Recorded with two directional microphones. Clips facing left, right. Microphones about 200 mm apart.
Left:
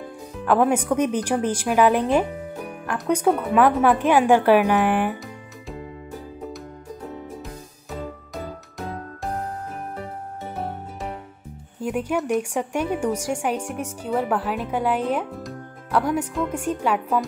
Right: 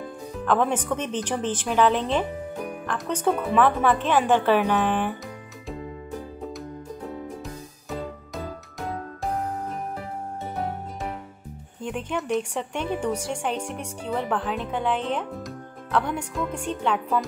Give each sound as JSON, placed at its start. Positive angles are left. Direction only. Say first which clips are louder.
{"t": 0.5, "sound": "a woman's voice", "louder": "left 4 dB", "side_deg": 10}
{"t": 11.8, "sound": "a woman's voice", "louder": "left 5 dB", "side_deg": 5}